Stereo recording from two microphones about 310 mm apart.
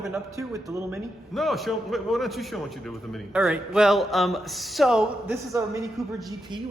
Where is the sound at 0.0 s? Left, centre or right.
Centre.